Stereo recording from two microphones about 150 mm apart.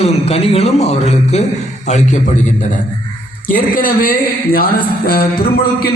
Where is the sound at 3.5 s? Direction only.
70° left (ahead or behind).